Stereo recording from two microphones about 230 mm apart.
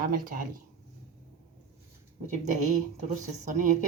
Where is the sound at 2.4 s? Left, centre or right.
Right.